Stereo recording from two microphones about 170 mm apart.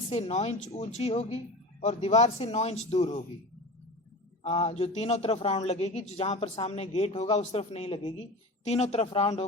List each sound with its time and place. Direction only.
0.1 s a man's voice: 40° left (ahead or behind)
4.4 s a man's voice: 35° left (ahead or behind)